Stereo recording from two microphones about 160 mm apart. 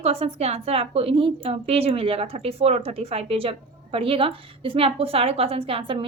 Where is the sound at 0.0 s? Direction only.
40° right (ahead or behind).